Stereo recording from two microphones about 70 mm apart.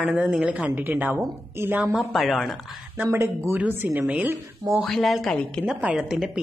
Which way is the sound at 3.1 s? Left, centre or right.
Right.